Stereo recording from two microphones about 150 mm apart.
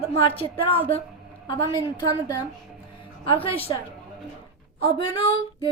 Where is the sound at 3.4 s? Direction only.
35° left (ahead or behind).